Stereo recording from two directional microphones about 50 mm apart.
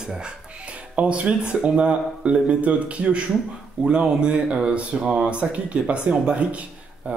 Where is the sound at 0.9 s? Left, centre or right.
Right.